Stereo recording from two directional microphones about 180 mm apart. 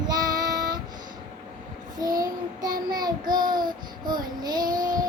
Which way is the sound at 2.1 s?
20° right (ahead or behind).